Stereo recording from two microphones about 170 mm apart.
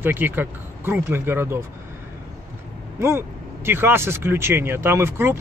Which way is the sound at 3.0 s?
15° right (ahead or behind).